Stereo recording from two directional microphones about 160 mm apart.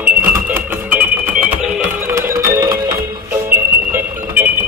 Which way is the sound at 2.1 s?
15° right (ahead or behind).